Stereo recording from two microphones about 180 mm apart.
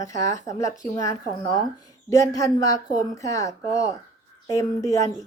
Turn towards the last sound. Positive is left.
turn(degrees=20)  # may be behind; listen again after turning